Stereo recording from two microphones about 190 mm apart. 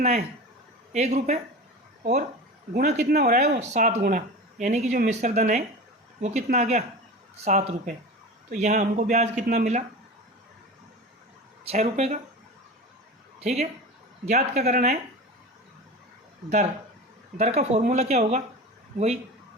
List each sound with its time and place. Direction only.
0.0 s speech: 35° right (ahead or behind)
2.7 s speech: 40° right (ahead or behind)
3.1 s speech: 55° right (ahead or behind)
3.3 s speech: 35° right (ahead or behind)
11.6 s speech: 35° right (ahead or behind)
13.4 s a woman's voice: 35° right (ahead or behind)
17.3 s speech: 35° right (ahead or behind)